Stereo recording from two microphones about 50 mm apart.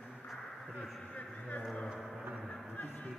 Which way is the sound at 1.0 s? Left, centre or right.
Left.